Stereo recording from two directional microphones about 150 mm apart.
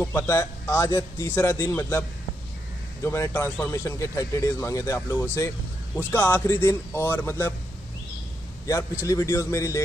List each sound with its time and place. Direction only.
0.0 s a man's voice: 20° left (ahead or behind)
8.6 s speech: 20° left (ahead or behind)